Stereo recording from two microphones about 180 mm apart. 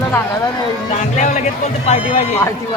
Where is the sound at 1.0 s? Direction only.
40° left (ahead or behind).